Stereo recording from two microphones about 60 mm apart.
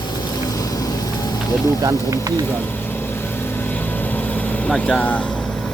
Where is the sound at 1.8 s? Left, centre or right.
Right.